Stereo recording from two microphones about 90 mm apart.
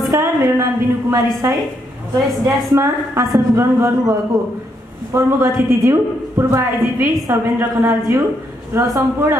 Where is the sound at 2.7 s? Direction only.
35° right (ahead or behind).